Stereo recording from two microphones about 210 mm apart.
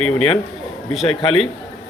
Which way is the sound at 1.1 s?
25° left (ahead or behind).